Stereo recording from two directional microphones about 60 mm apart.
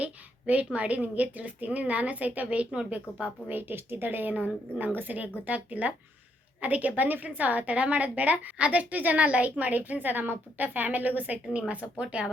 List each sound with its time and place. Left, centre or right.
0.0 s a woman's voice: right
3.5 s a woman's voice: right
12.0 s speech: centre